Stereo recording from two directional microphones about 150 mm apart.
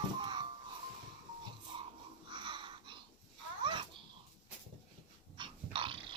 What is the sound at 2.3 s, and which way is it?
Babbling, 35° right (ahead or behind).